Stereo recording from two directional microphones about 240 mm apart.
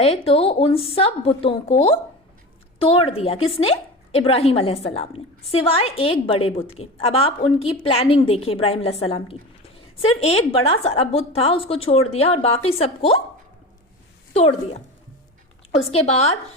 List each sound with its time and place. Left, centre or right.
0.0 s a woman's voice: left
14.3 s a woman's voice: left
15.9 s a woman's voice: left